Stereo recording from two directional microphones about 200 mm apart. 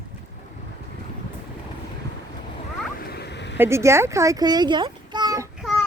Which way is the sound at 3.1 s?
55° left (ahead or behind).